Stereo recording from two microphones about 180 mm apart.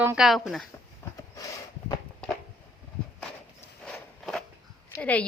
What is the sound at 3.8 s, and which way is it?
Walk, 5° left (ahead or behind).